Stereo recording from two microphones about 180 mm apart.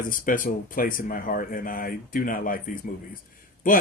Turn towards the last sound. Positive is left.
turn(degrees=50)  # may be behind; listen again after turning